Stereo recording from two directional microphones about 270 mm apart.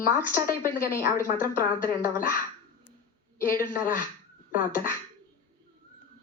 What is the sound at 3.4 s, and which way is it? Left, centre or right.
Speech, left.